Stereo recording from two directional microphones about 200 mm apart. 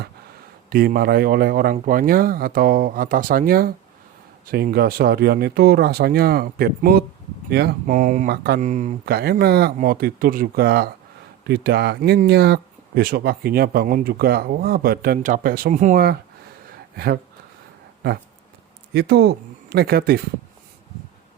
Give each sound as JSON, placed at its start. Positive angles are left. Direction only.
{"t": 0.7, "sound": "speech", "side_deg": -50}
{"t": 18.9, "sound": "speech", "side_deg": -55}